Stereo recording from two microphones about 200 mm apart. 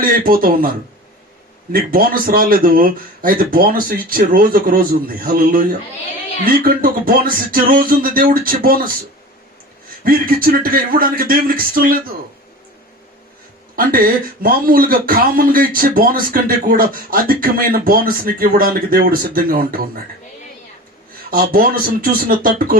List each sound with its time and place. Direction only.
0.0 s speech: 45° right (ahead or behind)
1.7 s speech: 45° right (ahead or behind)
10.0 s speech: 45° right (ahead or behind)
13.7 s speech: 45° right (ahead or behind)
21.2 s speech: 45° right (ahead or behind)